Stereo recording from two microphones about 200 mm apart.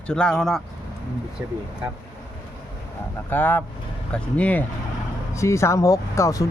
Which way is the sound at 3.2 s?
10° left (ahead or behind).